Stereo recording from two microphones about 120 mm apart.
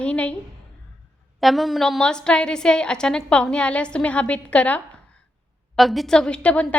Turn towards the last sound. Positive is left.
turn(degrees=10)  # may be behind; listen again after turning